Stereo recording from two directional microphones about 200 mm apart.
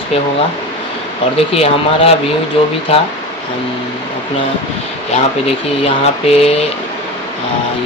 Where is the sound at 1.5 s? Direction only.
30° left (ahead or behind).